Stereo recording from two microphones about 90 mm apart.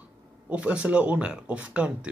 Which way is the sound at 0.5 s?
10° right (ahead or behind).